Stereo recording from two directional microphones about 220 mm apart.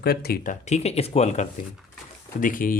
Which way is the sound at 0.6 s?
30° left (ahead or behind).